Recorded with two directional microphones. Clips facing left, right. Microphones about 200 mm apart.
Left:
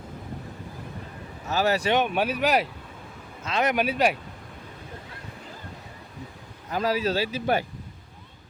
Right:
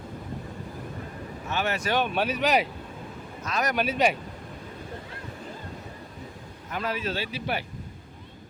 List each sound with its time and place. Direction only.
1.5 s speech: 35° left (ahead or behind)
1.9 s speech: 15° left (ahead or behind)
3.4 s speech: 25° left (ahead or behind)
3.8 s speech: 5° left (ahead or behind)
6.7 s speech: 35° left (ahead or behind)